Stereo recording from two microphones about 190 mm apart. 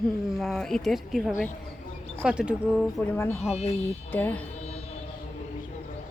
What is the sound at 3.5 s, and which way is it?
Speech, 30° left (ahead or behind).